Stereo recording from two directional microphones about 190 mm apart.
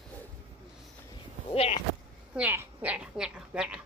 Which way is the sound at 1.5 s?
30° left (ahead or behind).